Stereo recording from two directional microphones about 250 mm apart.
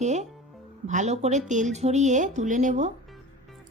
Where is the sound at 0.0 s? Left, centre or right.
Right.